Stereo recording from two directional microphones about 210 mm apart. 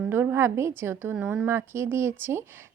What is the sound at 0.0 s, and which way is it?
A woman's voice, 10° right (ahead or behind).